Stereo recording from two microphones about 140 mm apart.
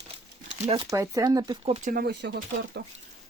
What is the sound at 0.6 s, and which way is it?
Speech, 45° right (ahead or behind).